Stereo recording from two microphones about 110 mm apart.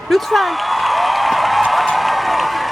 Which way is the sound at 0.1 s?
Centre (ahead or behind).